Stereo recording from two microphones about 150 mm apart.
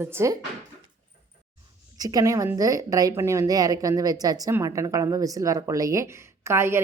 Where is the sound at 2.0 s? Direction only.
25° right (ahead or behind).